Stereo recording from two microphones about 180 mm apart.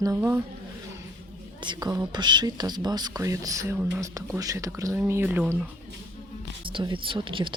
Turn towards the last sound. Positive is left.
turn(degrees=-30)  # may be behind; listen again after turning